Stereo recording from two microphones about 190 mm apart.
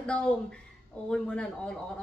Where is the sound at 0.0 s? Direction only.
5° left (ahead or behind).